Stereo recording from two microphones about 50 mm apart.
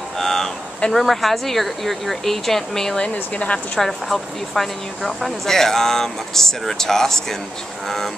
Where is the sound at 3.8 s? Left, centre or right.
Centre.